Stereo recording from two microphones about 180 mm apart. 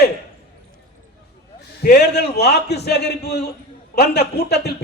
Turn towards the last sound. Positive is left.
turn(degrees=65)  # may be behind; listen again after turning